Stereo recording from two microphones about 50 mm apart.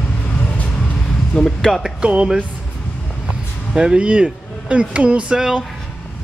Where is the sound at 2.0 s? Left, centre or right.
Centre.